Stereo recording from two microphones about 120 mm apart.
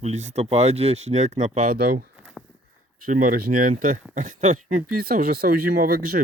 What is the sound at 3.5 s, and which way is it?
Speech, 80° right.